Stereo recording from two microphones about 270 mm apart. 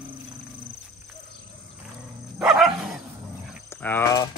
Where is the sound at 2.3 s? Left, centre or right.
Centre.